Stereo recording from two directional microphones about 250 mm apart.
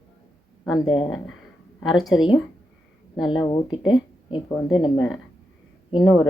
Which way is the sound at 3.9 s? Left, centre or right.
Centre.